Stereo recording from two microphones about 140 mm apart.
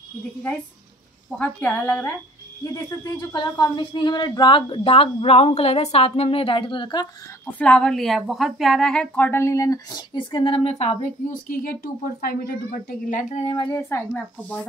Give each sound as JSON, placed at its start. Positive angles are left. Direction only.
{"t": 1.4, "sound": "a woman's voice", "side_deg": 10}
{"t": 3.3, "sound": "a woman's voice", "side_deg": 30}
{"t": 7.5, "sound": "a woman's voice", "side_deg": 5}
{"t": 11.4, "sound": "speech", "side_deg": 90}
{"t": 13.1, "sound": "a sound", "side_deg": 55}
{"t": 13.7, "sound": "a woman's voice", "side_deg": 15}